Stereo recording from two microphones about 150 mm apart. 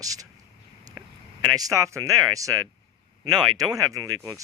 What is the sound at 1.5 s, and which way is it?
Speech, 20° right (ahead or behind).